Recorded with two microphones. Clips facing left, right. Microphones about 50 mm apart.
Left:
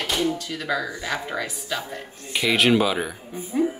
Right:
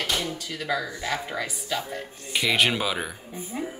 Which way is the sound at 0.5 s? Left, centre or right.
Centre.